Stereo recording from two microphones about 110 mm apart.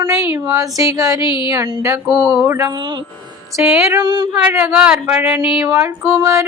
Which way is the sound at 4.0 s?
45° right (ahead or behind).